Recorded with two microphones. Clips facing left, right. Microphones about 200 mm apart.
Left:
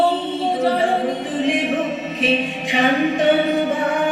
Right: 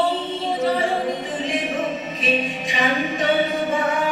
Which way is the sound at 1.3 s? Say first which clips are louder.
Left 5 dB; 60° left (ahead or behind).